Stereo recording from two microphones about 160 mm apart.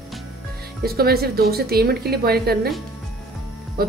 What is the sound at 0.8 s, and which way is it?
A woman's voice, 75° right (ahead or behind).